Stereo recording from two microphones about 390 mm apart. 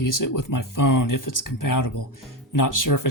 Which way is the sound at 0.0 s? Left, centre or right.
Left.